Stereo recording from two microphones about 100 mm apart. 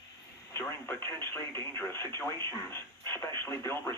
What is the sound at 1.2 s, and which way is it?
Speech, 25° left (ahead or behind).